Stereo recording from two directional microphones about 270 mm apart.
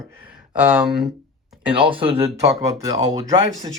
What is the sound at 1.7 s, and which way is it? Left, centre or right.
Speech, centre.